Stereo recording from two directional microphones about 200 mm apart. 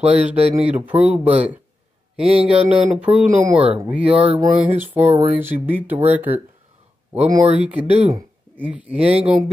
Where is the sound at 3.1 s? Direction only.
15° right (ahead or behind).